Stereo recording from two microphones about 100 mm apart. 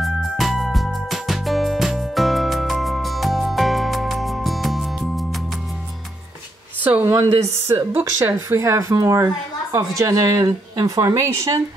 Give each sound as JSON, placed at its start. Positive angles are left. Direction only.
{"t": 0.0, "sound": "music", "side_deg": 0}
{"t": 6.8, "sound": "speech", "side_deg": -15}
{"t": 7.2, "sound": "speech", "side_deg": -30}